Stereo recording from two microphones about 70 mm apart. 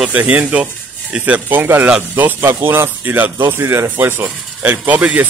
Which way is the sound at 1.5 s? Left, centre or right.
Right.